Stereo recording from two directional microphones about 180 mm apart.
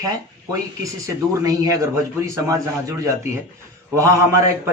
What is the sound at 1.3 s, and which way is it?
A man's voice, 20° right (ahead or behind).